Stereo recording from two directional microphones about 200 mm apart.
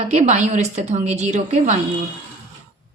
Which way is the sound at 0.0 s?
35° right (ahead or behind).